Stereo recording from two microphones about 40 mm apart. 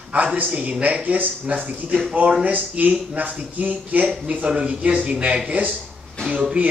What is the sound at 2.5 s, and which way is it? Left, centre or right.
Speech, right.